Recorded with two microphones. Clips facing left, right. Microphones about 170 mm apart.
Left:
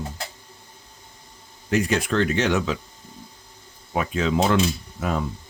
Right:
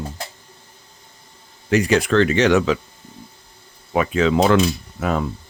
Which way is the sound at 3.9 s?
85° right.